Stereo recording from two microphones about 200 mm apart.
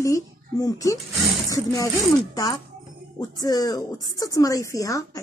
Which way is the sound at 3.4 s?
20° left (ahead or behind).